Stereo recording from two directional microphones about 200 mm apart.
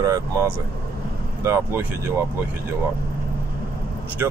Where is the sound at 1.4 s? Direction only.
15° right (ahead or behind).